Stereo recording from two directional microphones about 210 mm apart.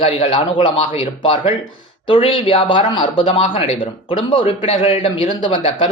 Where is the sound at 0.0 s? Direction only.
25° left (ahead or behind).